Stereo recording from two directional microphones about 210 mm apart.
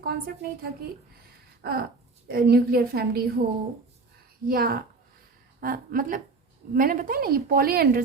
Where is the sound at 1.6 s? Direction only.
45° right (ahead or behind).